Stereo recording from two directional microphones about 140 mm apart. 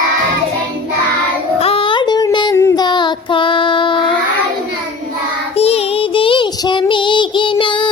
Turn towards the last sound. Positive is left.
turn(degrees=35)  # may be behind; listen again after turning